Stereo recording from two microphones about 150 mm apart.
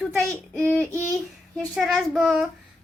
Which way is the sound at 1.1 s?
Centre (ahead or behind).